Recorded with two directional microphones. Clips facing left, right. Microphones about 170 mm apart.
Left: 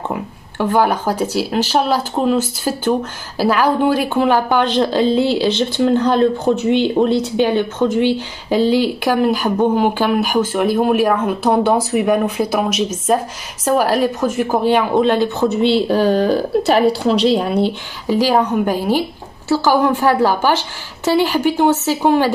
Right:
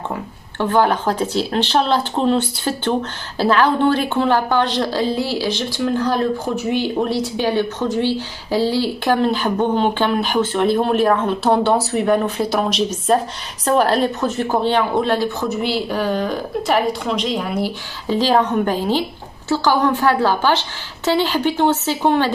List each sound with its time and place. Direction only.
0.8 s a woman's voice: 10° left (ahead or behind); by 17.7 s 30° left (ahead or behind)
18.0 s speech: 10° left (ahead or behind)